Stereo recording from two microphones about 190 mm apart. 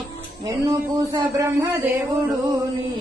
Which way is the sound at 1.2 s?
15° right (ahead or behind).